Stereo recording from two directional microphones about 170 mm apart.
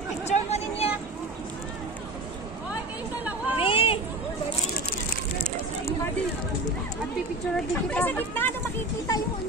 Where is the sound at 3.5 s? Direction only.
30° left (ahead or behind).